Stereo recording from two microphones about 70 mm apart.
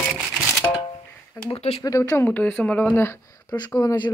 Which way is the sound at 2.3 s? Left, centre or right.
Centre.